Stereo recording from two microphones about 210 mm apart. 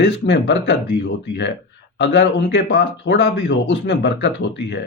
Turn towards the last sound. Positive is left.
turn(degrees=55)  # may be behind; listen again after turning